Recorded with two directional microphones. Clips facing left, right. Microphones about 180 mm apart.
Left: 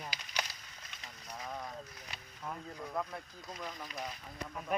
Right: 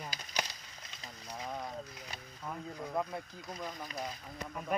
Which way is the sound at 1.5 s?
15° right (ahead or behind).